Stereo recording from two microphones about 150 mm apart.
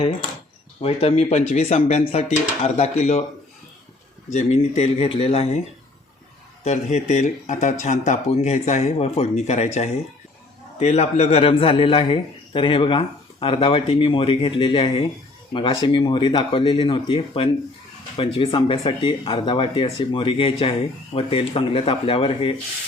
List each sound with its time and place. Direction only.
0.8 s speech: 45° left (ahead or behind)
4.3 s speech: 50° left (ahead or behind)
6.7 s speech: 50° left (ahead or behind)
10.8 s a man's voice: 45° left (ahead or behind)